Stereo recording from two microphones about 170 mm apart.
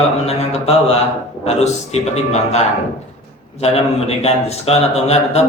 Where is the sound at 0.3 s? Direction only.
35° left (ahead or behind).